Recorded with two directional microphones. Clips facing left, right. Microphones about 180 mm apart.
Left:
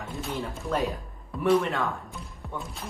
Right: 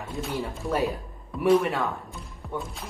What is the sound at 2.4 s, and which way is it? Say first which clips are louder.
Music: right 4 dB; centre (ahead or behind).